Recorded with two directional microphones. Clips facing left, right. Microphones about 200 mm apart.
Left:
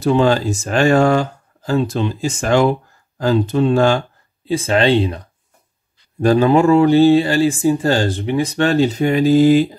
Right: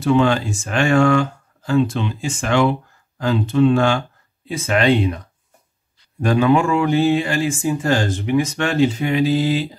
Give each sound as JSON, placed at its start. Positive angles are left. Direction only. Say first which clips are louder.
{"t": 0.0, "sound": "speech", "louder": "left 2 dB", "side_deg": 35}
{"t": 6.2, "sound": "speech", "louder": "left 4 dB", "side_deg": 35}